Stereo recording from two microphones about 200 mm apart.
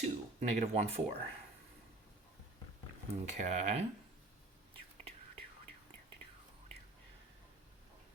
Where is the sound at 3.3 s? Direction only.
35° right (ahead or behind).